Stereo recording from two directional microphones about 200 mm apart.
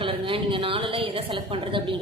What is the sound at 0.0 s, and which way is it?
A woman's voice, 25° right (ahead or behind).